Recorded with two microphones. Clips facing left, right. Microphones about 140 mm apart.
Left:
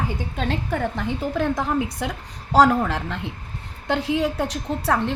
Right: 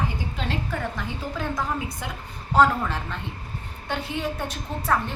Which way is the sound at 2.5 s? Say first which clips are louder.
Left 3 dB; 90° left.